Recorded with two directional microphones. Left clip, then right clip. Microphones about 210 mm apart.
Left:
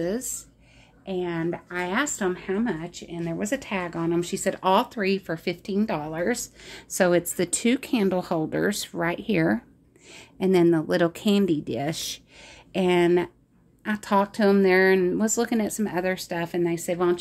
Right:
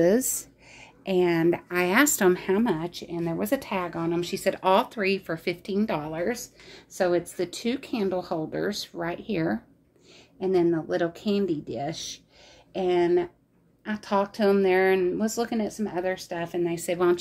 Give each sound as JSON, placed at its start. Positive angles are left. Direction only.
{"t": 0.0, "sound": "a woman's voice", "side_deg": -40}
{"t": 2.7, "sound": "speech", "side_deg": -25}
{"t": 3.9, "sound": "speech", "side_deg": 15}
{"t": 6.3, "sound": "speech", "side_deg": 40}
{"t": 16.8, "sound": "speech", "side_deg": 15}